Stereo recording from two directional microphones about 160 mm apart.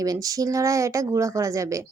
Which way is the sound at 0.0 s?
20° right (ahead or behind).